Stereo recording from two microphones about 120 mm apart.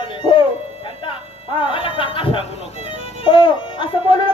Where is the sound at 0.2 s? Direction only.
45° left (ahead or behind).